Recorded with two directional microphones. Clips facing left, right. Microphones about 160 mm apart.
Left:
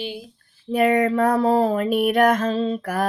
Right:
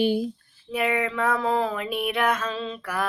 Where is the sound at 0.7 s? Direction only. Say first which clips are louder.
Left 7 dB; 40° left (ahead or behind).